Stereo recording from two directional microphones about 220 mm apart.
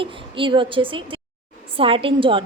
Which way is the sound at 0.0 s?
25° right (ahead or behind).